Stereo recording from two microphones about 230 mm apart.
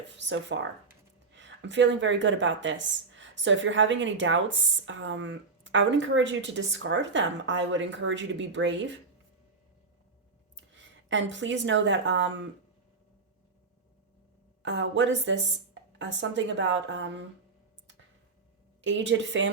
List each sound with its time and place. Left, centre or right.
0.1 s speech: right
10.8 s speech: right
14.6 s speech: right
18.8 s speech: right